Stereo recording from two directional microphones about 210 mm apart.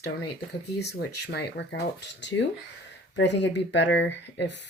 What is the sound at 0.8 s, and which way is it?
Speech, 50° left (ahead or behind).